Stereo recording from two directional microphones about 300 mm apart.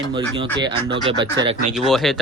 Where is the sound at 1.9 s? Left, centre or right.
Centre.